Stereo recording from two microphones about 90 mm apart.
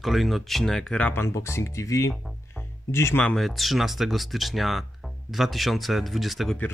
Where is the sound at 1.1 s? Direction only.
30° left (ahead or behind).